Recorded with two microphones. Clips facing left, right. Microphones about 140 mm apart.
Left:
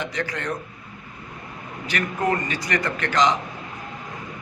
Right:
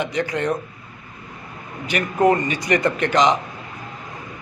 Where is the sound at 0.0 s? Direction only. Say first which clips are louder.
Right 6 dB; 20° right (ahead or behind).